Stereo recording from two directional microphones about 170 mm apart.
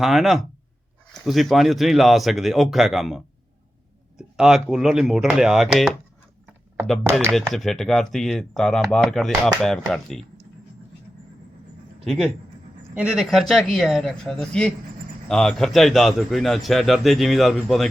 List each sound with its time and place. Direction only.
0.0 s a man's voice: centre (ahead or behind)
4.4 s a man's voice: 5° right (ahead or behind)
7.0 s speech: 15° right (ahead or behind)
7.3 s a man's voice: centre (ahead or behind)
12.0 s a man's voice: centre (ahead or behind)